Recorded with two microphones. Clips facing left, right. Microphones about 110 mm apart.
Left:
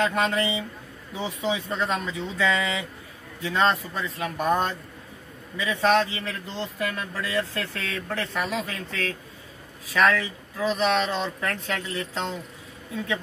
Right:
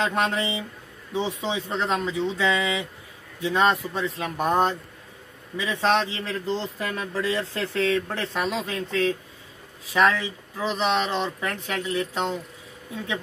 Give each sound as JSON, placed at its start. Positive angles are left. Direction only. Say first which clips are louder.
{"t": 0.0, "sound": "speech", "louder": "left 1 dB", "side_deg": -20}
{"t": 1.5, "sound": "speech", "louder": "left 1 dB", "side_deg": -25}